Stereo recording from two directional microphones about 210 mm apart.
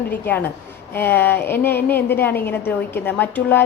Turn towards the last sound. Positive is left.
turn(degrees=10)  # may be behind; listen again after turning